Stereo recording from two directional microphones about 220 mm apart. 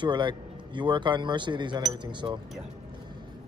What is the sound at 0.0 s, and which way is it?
Speech, 20° right (ahead or behind).